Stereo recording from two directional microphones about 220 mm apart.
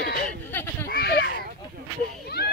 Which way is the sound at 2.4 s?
50° left (ahead or behind).